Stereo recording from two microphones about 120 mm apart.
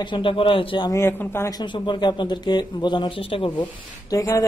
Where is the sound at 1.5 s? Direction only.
35° left (ahead or behind).